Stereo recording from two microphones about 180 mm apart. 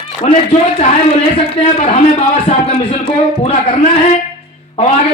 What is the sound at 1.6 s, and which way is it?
A man's voice, 35° left (ahead or behind).